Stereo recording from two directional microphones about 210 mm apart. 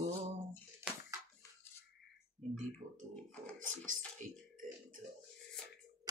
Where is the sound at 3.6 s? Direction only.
40° right (ahead or behind).